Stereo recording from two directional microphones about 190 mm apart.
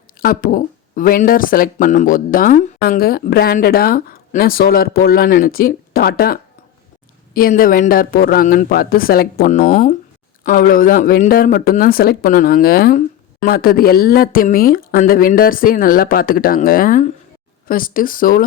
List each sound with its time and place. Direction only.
0.2 s speech: 50° left (ahead or behind)